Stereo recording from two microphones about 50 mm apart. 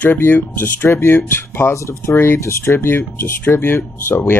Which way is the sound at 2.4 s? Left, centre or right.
Left.